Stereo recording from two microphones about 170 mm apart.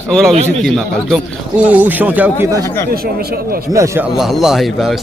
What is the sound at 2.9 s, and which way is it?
Speech, 65° right (ahead or behind).